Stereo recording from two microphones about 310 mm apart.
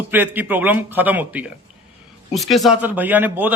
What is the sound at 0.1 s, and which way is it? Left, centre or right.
A man's voice, centre.